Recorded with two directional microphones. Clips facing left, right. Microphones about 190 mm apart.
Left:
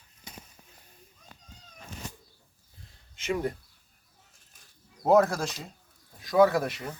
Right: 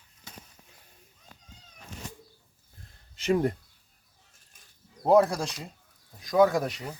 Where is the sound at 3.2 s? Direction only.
35° right (ahead or behind).